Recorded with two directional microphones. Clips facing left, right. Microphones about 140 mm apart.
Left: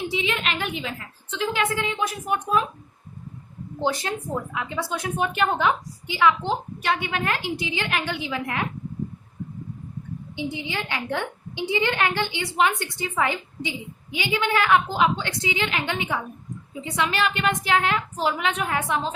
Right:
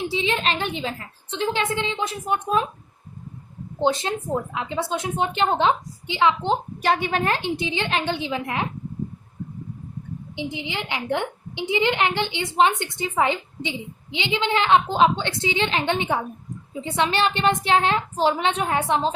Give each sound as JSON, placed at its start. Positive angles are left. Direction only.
{"t": 0.1, "sound": "a woman's voice", "side_deg": -30}
{"t": 3.8, "sound": "a woman's voice", "side_deg": -25}
{"t": 6.8, "sound": "a woman's voice", "side_deg": -35}
{"t": 10.3, "sound": "a woman's voice", "side_deg": -20}